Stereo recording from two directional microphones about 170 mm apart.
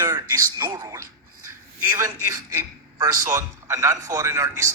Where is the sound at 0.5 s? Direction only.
20° right (ahead or behind).